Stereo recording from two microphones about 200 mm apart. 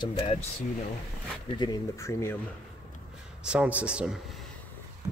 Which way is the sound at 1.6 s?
15° left (ahead or behind).